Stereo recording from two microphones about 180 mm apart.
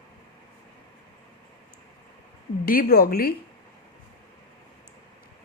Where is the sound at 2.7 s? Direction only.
55° left (ahead or behind).